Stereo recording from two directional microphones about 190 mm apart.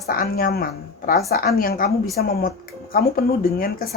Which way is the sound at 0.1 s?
50° left (ahead or behind).